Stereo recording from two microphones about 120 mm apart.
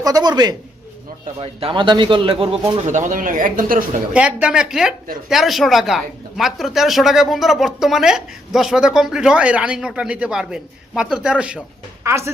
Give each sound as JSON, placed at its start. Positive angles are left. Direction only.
{"t": 0.0, "sound": "a man's voice", "side_deg": -30}
{"t": 1.4, "sound": "a man's voice", "side_deg": -50}
{"t": 2.8, "sound": "speech", "side_deg": -90}
{"t": 4.1, "sound": "speech", "side_deg": -10}
{"t": 12.0, "sound": "speech", "side_deg": -20}